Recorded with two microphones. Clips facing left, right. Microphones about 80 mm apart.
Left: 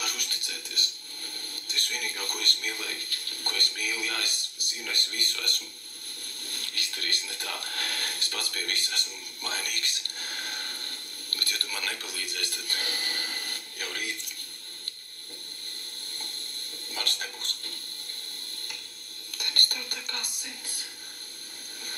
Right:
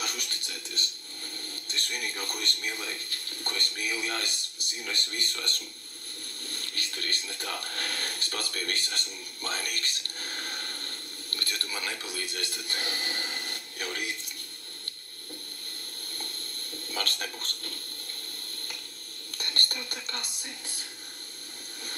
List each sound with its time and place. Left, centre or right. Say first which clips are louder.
0.0 s speech: even; right
16.9 s speech: right 2 dB; right
19.3 s speech: even; right